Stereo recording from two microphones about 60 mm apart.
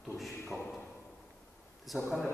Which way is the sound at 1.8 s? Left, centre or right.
Centre.